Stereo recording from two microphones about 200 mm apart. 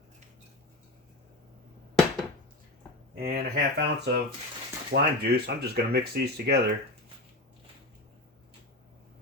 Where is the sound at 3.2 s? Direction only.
50° right (ahead or behind).